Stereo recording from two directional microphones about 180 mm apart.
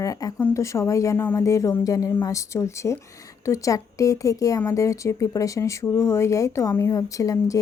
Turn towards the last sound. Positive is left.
turn(degrees=20)  # may be behind; listen again after turning